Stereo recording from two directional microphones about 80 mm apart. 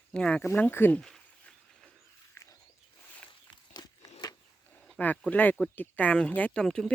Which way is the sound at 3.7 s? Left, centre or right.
Left.